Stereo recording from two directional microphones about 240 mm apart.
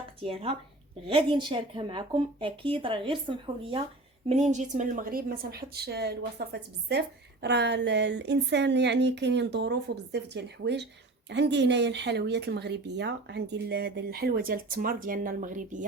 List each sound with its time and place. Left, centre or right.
0.2 s a woman's voice: right